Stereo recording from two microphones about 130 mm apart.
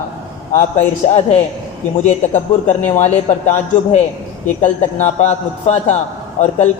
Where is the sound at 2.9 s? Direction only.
60° left (ahead or behind).